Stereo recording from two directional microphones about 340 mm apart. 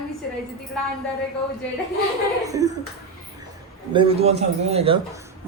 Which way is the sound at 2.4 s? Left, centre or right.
Centre.